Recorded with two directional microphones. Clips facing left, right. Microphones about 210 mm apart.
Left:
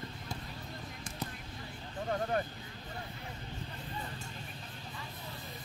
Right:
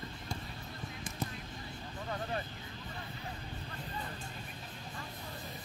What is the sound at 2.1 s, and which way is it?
Vehicle, 50° left (ahead or behind).